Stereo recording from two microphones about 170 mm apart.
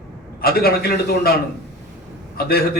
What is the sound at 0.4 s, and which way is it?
Speech, 65° left (ahead or behind).